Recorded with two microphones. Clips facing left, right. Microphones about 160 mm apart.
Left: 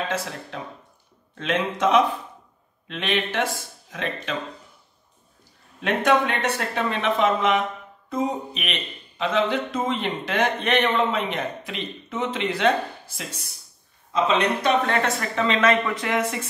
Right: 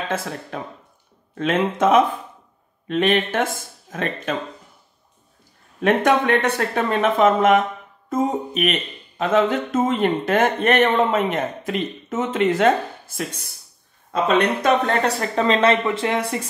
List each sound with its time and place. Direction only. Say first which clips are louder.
1.4 s speech: right 4 dB; 50° right (ahead or behind)
5.8 s speech: right 3 dB; 55° right (ahead or behind); by 16.4 s 35° right (ahead or behind)